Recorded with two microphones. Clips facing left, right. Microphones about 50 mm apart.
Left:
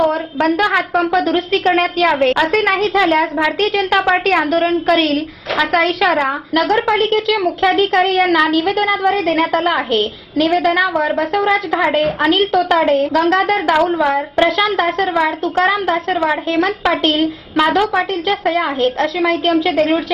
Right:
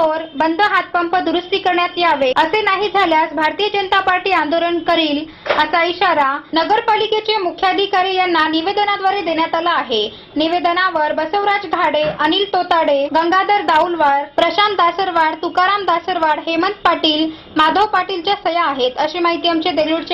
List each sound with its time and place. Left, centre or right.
0.5 s a woman's voice: centre
7.2 s a woman's voice: centre